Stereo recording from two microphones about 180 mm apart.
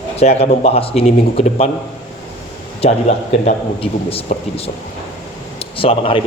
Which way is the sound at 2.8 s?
35° left (ahead or behind).